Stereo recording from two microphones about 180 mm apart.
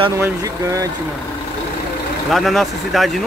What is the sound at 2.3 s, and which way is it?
Speech, centre (ahead or behind).